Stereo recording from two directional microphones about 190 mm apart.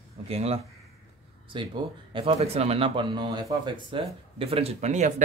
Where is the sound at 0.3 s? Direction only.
30° right (ahead or behind).